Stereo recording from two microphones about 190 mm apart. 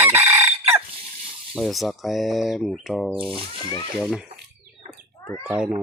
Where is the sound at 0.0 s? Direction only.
10° right (ahead or behind).